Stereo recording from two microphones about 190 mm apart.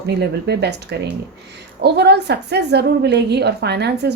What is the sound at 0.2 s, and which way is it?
A woman's voice, 60° right (ahead or behind).